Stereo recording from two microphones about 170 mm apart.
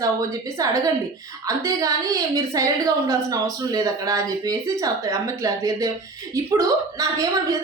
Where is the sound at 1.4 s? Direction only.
20° right (ahead or behind).